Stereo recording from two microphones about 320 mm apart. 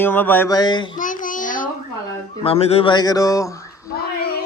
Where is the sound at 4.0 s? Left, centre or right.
Left.